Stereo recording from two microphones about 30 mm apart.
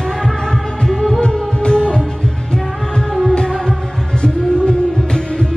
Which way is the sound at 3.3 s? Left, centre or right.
Left.